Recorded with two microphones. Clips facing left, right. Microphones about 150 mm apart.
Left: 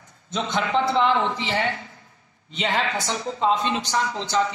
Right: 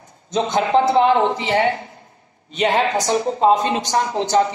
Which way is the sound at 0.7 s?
55° right (ahead or behind).